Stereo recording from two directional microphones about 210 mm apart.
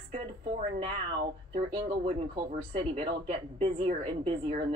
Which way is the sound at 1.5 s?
25° right (ahead or behind).